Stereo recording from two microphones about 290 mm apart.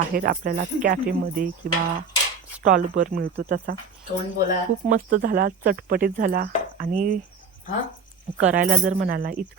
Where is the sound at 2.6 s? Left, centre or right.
Right.